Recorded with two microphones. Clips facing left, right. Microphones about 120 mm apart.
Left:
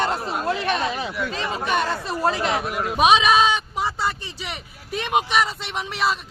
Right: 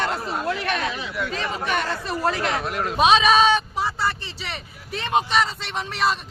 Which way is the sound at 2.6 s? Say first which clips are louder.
Right 1 dB; 5° left (ahead or behind).